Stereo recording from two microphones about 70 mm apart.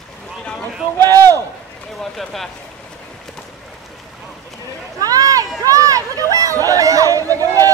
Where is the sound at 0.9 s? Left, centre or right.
Right.